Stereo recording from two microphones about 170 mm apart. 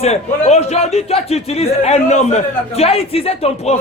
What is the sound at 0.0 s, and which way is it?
A man's voice, 40° left (ahead or behind).